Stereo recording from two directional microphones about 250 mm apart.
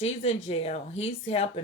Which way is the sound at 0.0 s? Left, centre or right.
Left.